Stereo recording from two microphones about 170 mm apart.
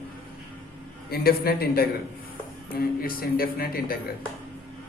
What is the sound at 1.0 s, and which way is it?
Speech, 65° left (ahead or behind).